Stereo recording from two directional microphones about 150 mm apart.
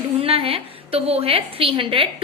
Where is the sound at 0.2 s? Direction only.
40° right (ahead or behind).